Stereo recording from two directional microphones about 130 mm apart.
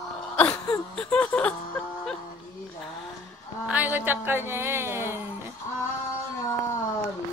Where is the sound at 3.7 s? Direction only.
15° right (ahead or behind).